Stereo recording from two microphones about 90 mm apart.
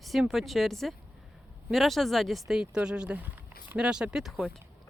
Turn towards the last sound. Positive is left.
turn(degrees=-5)  # may be behind; listen again after turning